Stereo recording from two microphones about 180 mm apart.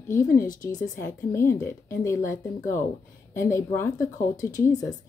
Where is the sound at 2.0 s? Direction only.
15° left (ahead or behind).